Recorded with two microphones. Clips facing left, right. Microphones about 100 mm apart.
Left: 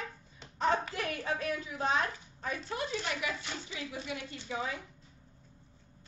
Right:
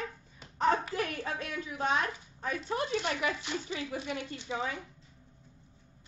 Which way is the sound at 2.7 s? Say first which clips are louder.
Right 5 dB; 45° right (ahead or behind).